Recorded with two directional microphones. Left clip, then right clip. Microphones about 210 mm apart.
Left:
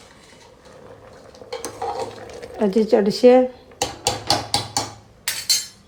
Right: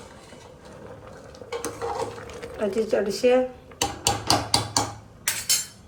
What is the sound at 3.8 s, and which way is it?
Hammer, centre (ahead or behind).